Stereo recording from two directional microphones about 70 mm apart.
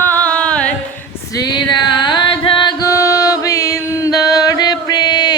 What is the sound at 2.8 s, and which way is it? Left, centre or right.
Music, left.